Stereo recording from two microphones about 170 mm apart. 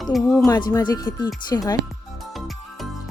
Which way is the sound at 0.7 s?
20° left (ahead or behind).